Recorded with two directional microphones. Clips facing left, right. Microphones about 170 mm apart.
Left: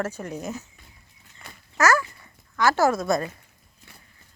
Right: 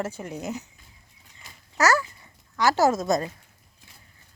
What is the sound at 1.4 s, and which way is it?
Dog, 60° left (ahead or behind).